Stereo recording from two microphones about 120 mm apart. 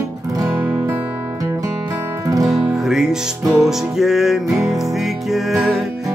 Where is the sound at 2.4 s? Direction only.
Centre (ahead or behind).